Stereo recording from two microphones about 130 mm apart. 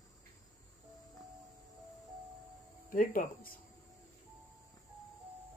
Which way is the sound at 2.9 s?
90° left.